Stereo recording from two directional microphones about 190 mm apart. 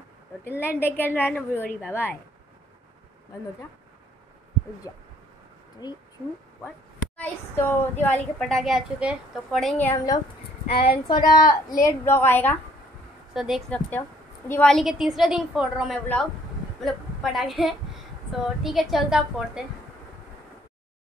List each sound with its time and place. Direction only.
0.6 s a woman's voice: 10° left (ahead or behind)
4.9 s speech: 20° left (ahead or behind)
7.2 s a woman's voice: 10° left (ahead or behind)
10.7 s a woman's voice: 30° left (ahead or behind); by 12.5 s 10° left (ahead or behind)
13.3 s a woman's voice: centre (ahead or behind)